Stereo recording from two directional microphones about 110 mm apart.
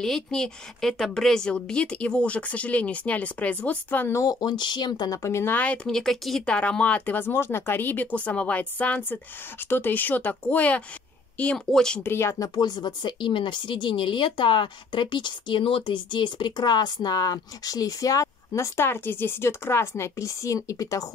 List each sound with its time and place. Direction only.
0.0 s speech: 5° left (ahead or behind)
4.2 s speech: 35° left (ahead or behind)
5.2 s speech: 25° left (ahead or behind); by 12.0 s 5° left (ahead or behind)
12.0 s speech: 20° left (ahead or behind)
12.5 s speech: 40° left (ahead or behind)